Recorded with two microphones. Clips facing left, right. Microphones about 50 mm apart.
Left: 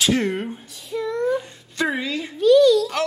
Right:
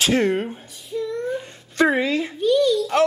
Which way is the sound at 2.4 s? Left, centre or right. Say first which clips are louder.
Left 5 dB; left.